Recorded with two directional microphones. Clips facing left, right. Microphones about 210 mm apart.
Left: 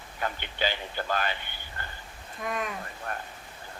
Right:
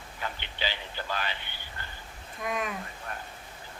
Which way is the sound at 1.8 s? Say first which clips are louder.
Left 4 dB; 50° left (ahead or behind).